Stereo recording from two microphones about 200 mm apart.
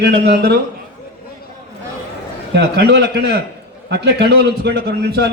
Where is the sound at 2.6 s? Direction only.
60° right (ahead or behind).